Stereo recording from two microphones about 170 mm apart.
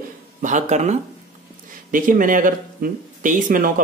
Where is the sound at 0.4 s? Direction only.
45° right (ahead or behind).